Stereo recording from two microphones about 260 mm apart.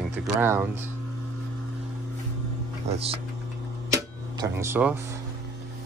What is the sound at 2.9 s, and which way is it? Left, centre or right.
Speech, right.